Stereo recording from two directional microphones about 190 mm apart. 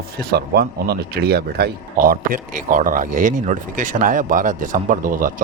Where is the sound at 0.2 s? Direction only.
55° right (ahead or behind).